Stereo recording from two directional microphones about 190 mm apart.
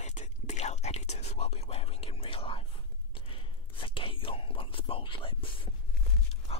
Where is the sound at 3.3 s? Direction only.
25° left (ahead or behind).